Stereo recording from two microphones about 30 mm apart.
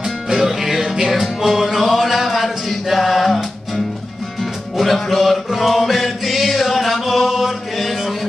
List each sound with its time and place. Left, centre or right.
0.0 s music: centre
0.9 s music: right
1.2 s music: centre
4.4 s music: centre
7.2 s chant: centre
7.7 s mantra: centre